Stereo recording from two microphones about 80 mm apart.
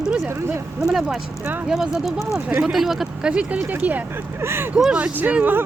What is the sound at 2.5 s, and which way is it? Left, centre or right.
Speech, centre.